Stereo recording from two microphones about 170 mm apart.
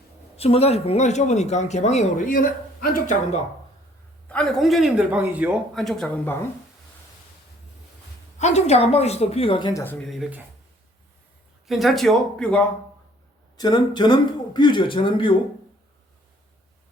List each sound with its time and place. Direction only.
0.3 s speech: 35° left (ahead or behind); by 3.2 s 55° left (ahead or behind)
4.3 s a man's voice: centre (ahead or behind)
8.4 s speech: 40° left (ahead or behind)
10.1 s a man's voice: 5° right (ahead or behind)
11.7 s a man's voice: centre (ahead or behind)
13.6 s speech: 25° left (ahead or behind)